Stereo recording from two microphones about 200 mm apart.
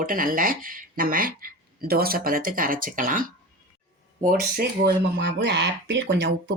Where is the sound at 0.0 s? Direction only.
45° right (ahead or behind).